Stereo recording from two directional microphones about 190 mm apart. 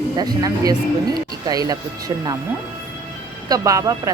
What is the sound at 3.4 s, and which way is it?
Speech, 20° right (ahead or behind).